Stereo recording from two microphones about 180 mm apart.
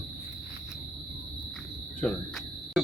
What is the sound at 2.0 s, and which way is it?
Speech, 10° left (ahead or behind).